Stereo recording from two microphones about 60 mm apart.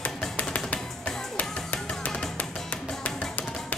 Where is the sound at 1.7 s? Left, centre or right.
Centre.